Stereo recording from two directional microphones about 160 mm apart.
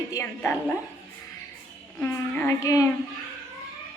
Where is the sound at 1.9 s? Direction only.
10° left (ahead or behind).